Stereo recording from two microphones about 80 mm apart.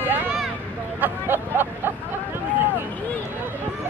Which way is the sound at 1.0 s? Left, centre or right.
Right.